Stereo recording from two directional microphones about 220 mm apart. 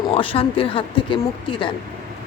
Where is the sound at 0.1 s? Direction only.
25° left (ahead or behind).